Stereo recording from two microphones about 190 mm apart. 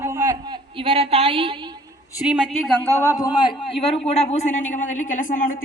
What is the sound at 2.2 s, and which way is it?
A man's voice, 5° right (ahead or behind).